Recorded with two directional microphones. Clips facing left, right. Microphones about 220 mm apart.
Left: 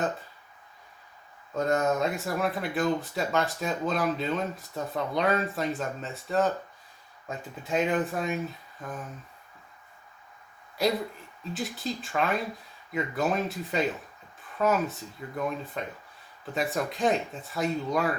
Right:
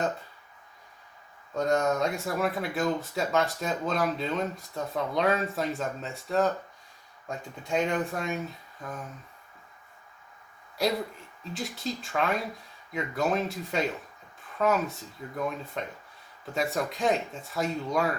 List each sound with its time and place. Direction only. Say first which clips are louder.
1.5 s speech: even; centre (ahead or behind)
10.8 s speech: left 1 dB; centre (ahead or behind)